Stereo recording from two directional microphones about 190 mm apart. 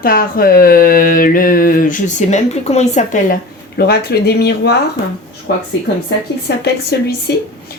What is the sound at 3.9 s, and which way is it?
Speech, 60° left (ahead or behind).